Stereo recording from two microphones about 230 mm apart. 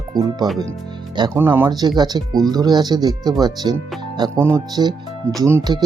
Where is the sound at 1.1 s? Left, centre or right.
Centre.